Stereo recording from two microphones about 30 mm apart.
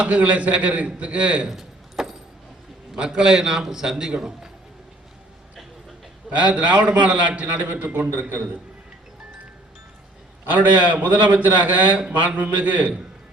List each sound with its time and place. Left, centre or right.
0.0 s a man's voice: right
1.5 s keys jangling: centre
2.9 s a man's voice: right
6.3 s a man's voice: right
7.4 s a man's voice: right
7.9 s a man's voice: right
10.4 s a man's voice: right
10.9 s a man's voice: right